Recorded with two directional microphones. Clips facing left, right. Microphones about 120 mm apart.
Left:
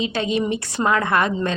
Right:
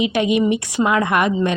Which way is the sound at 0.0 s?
15° right (ahead or behind).